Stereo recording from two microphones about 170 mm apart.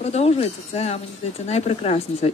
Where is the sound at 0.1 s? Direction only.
40° left (ahead or behind).